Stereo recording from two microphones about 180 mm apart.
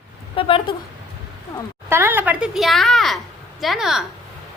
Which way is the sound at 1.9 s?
10° right (ahead or behind).